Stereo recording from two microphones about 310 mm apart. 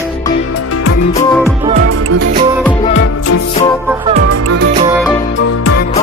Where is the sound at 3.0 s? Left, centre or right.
Left.